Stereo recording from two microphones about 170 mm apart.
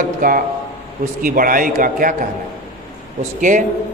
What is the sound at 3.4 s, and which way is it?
Speech, 50° right (ahead or behind).